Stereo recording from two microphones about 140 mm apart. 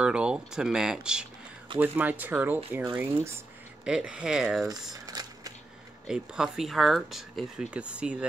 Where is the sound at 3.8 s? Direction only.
10° right (ahead or behind).